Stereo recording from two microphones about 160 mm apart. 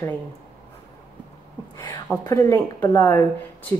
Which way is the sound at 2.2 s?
20° left (ahead or behind).